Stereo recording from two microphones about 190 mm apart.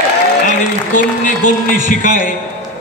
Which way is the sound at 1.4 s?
45° left (ahead or behind).